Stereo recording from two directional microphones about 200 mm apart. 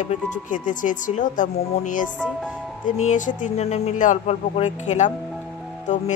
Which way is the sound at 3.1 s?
40° left (ahead or behind).